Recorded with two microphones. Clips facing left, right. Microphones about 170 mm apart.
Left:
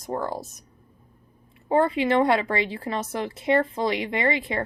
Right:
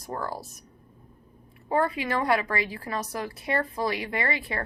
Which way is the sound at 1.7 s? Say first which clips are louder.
Left 5 dB; 25° left (ahead or behind).